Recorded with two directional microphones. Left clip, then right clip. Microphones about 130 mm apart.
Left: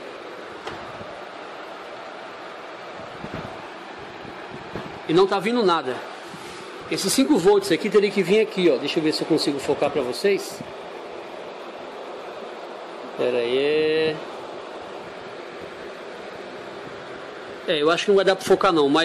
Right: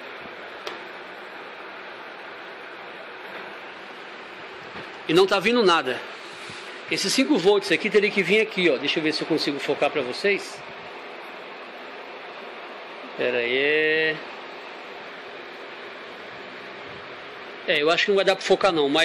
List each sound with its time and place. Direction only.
5.0 s a man's voice: 20° right (ahead or behind)
6.9 s speech: 10° left (ahead or behind)
13.2 s speech: centre (ahead or behind)
17.6 s speech: 10° left (ahead or behind)